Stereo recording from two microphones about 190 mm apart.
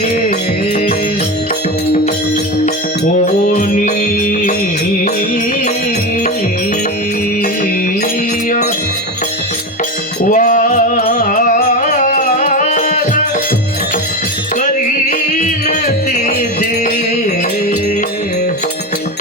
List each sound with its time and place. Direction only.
3.2 s music: 40° left (ahead or behind)
10.2 s music: 45° left (ahead or behind)
15.3 s music: 40° left (ahead or behind)